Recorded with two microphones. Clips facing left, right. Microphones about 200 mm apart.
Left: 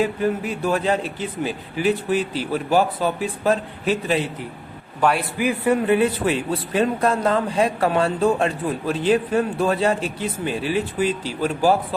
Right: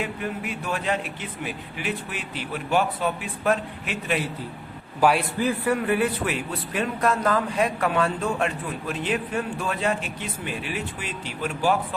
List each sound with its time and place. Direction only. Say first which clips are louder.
0.0 s a man's voice: left 8 dB; 35° left (ahead or behind)
4.9 s a man's voice: even; 5° right (ahead or behind)
5.4 s a man's voice: left 4 dB; 20° left (ahead or behind); by 11.9 s 35° left (ahead or behind)